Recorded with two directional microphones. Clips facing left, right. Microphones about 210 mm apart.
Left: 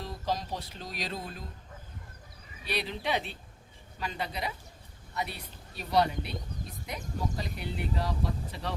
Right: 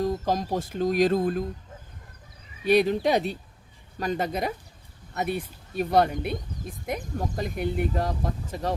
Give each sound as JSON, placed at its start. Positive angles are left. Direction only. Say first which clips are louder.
{"t": 0.0, "sound": "speech", "louder": "right 9 dB", "side_deg": -45}
{"t": 2.6, "sound": "speech", "louder": "right 12 dB", "side_deg": -45}